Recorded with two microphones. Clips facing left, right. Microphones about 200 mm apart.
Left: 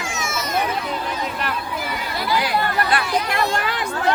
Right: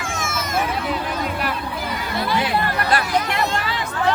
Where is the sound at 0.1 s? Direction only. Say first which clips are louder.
Right 2 dB; 50° right (ahead or behind).